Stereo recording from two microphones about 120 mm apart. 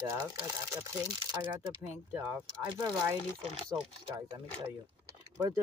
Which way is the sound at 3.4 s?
55° right (ahead or behind).